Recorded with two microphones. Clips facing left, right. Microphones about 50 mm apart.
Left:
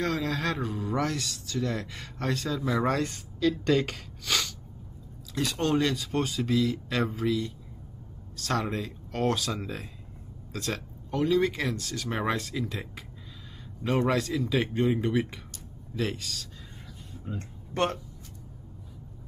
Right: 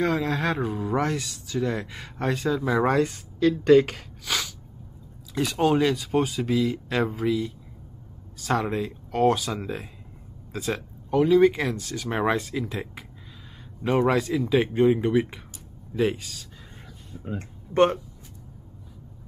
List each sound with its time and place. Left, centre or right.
0.0 s speech: centre
13.8 s speech: centre
17.2 s speech: right